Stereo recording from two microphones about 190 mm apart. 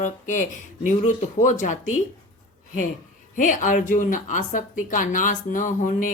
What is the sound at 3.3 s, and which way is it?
A woman's voice, 45° left (ahead or behind).